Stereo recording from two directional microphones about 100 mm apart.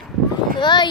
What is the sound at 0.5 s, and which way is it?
Speech, 50° left (ahead or behind).